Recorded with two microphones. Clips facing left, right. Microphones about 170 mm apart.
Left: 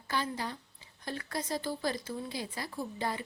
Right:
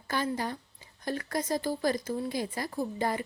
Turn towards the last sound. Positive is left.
turn(degrees=-45)  # may be behind; listen again after turning